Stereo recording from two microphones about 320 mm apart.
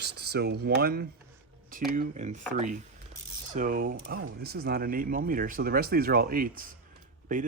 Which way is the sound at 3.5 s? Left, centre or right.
Right.